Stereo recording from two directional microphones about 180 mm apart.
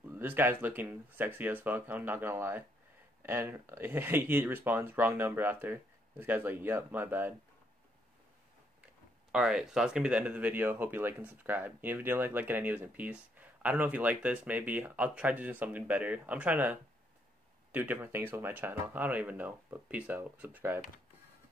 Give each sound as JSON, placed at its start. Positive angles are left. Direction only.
{"t": 0.1, "sound": "speech", "side_deg": -10}
{"t": 9.3, "sound": "speech", "side_deg": -5}
{"t": 17.7, "sound": "speech", "side_deg": -10}